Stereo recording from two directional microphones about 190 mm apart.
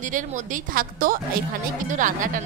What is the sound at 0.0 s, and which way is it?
A woman's voice, 40° right (ahead or behind).